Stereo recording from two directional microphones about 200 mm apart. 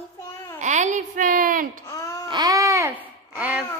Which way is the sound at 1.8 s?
15° left (ahead or behind).